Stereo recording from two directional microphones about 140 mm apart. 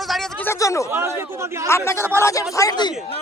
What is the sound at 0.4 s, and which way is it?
Speech, 20° left (ahead or behind).